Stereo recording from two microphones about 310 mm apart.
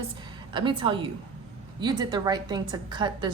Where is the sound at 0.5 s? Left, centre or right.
Centre.